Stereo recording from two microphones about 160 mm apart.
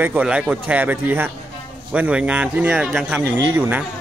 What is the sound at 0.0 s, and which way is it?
A man's voice, 10° right (ahead or behind).